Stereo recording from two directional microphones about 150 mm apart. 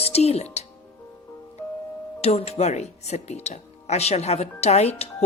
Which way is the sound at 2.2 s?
45° left (ahead or behind).